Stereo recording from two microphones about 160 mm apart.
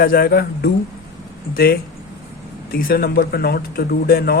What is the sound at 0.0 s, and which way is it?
Speech, 70° left (ahead or behind).